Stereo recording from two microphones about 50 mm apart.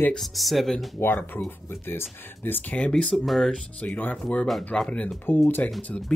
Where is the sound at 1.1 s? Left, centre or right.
Left.